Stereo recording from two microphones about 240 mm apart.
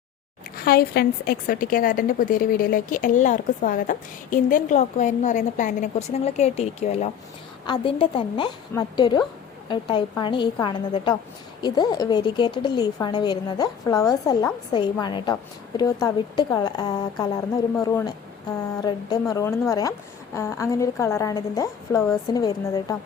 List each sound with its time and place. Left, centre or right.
0.5 s a woman's voice: left; by 23.0 s centre